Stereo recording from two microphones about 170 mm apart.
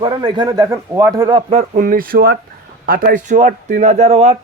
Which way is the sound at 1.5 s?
40° right (ahead or behind).